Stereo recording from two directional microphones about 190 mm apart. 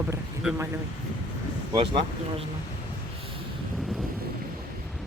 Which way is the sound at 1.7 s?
30° right (ahead or behind).